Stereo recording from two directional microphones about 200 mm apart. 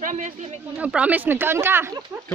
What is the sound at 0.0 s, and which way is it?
Speech, 40° right (ahead or behind).